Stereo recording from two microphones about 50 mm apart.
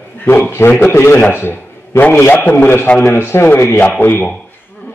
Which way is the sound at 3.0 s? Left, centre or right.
Left.